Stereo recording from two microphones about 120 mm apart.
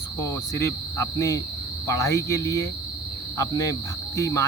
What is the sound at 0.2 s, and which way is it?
Speech, 25° left (ahead or behind).